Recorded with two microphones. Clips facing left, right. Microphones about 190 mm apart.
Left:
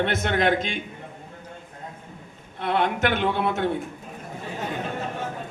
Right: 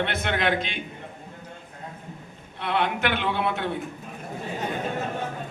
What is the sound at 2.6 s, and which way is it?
A man's voice, 45° left (ahead or behind).